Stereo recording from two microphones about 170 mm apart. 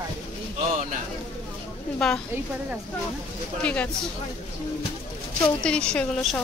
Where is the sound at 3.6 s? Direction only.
5° left (ahead or behind).